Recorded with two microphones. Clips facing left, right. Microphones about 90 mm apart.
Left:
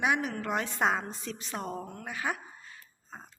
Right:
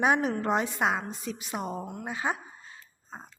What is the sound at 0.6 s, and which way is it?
A woman's voice, 5° right (ahead or behind).